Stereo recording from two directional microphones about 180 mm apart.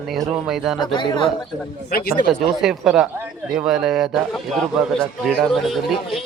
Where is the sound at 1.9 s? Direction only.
60° left (ahead or behind).